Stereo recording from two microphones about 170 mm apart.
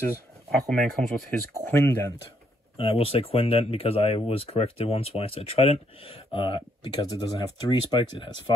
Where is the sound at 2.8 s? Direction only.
35° left (ahead or behind).